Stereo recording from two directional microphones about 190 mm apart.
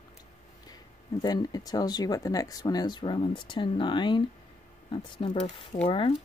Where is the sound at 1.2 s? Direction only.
20° left (ahead or behind).